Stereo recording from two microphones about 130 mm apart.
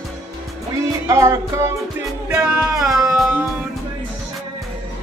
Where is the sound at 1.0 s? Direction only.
20° right (ahead or behind).